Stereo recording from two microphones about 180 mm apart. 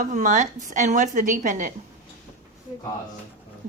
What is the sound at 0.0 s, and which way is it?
A woman's voice, 45° right (ahead or behind).